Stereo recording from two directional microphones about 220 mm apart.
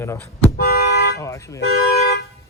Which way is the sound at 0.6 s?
45° left (ahead or behind).